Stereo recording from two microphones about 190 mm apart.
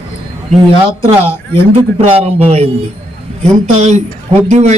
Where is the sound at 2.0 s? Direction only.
30° right (ahead or behind).